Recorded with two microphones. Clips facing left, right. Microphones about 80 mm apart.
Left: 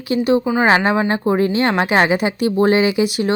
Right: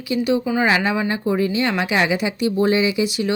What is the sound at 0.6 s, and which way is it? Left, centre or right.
Speech, left.